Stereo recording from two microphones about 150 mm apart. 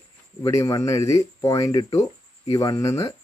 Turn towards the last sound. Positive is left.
turn(degrees=20)  # may be behind; listen again after turning